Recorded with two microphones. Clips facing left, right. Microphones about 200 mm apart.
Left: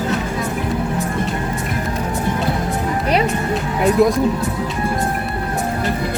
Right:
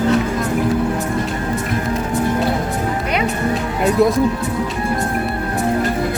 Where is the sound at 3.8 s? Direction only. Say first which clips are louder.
Left 1 dB; centre (ahead or behind).